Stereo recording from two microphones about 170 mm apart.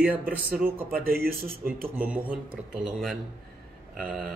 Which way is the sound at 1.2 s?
65° right (ahead or behind).